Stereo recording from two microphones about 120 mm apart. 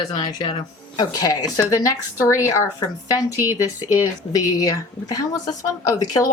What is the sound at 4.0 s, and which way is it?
A woman's voice, 30° left (ahead or behind).